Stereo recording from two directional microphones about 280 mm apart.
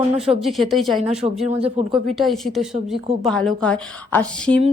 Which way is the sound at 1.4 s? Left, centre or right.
Right.